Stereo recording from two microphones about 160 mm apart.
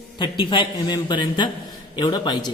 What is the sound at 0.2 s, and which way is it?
A man's voice, 30° left (ahead or behind).